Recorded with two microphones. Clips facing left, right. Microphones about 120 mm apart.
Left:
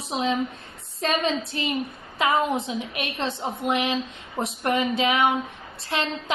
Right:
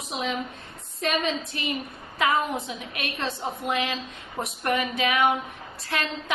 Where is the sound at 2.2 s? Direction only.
25° left (ahead or behind).